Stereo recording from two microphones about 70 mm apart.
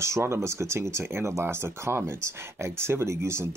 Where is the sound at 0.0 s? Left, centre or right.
Right.